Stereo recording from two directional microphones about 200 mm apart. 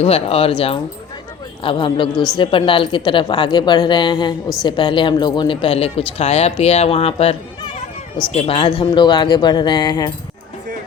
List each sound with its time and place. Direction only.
0.0 s speech: 30° left (ahead or behind)